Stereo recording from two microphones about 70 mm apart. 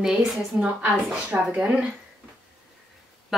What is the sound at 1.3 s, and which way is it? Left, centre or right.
Speech, right.